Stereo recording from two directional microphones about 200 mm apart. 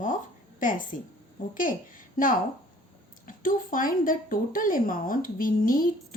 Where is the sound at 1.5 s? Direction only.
45° left (ahead or behind).